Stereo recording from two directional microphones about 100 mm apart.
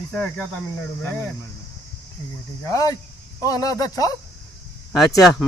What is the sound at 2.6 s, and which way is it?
Speech, 35° left (ahead or behind).